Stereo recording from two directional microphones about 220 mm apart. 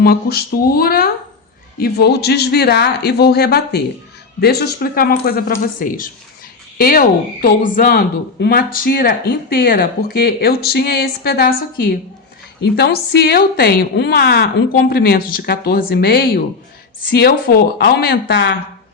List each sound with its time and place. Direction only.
0.0 s speech: 45° left (ahead or behind)